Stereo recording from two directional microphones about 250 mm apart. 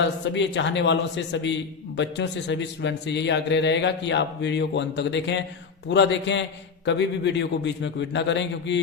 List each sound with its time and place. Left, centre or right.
0.0 s a man's voice: left